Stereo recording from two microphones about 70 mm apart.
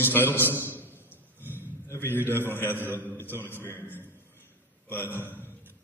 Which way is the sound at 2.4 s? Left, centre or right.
Left.